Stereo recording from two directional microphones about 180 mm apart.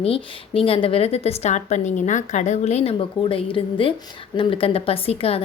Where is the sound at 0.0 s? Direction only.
30° left (ahead or behind).